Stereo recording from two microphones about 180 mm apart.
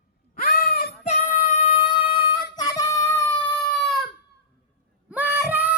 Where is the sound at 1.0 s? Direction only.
40° left (ahead or behind); by 3.3 s 15° left (ahead or behind).